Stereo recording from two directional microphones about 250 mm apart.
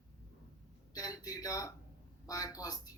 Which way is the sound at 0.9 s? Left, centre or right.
Centre.